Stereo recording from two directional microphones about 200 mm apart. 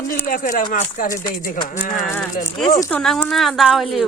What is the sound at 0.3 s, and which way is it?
Speech, 40° left (ahead or behind).